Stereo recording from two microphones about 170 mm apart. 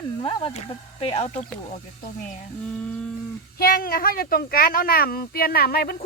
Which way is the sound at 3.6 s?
60° left (ahead or behind).